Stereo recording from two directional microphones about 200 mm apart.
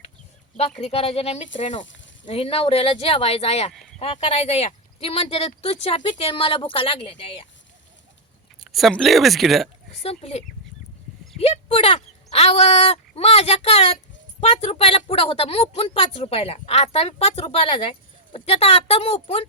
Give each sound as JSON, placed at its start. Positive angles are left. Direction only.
{"t": 0.8, "sound": "a woman's voice", "side_deg": 30}
{"t": 8.6, "sound": "speech", "side_deg": 0}
{"t": 10.0, "sound": "a woman's voice", "side_deg": 30}